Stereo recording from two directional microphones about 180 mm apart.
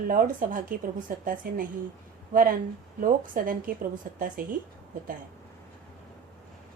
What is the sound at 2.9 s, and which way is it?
A woman's voice, 50° right (ahead or behind).